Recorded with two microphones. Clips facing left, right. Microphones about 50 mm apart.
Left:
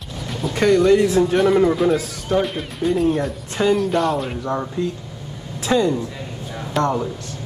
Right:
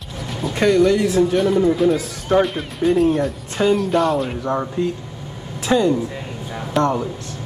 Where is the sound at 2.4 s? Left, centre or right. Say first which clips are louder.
Right 3 dB; centre.